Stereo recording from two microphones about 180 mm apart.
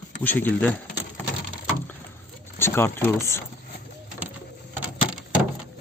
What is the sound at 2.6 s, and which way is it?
Speech, 15° left (ahead or behind).